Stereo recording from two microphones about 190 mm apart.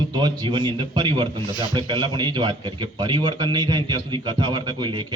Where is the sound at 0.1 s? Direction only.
20° right (ahead or behind).